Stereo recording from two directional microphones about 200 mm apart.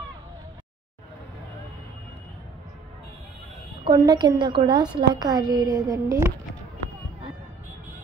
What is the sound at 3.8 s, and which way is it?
A woman's voice, 20° right (ahead or behind).